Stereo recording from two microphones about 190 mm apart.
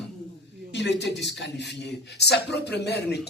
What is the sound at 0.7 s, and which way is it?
A man's voice, 65° left (ahead or behind).